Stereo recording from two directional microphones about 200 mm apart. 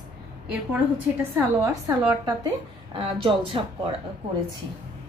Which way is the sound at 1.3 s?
15° right (ahead or behind).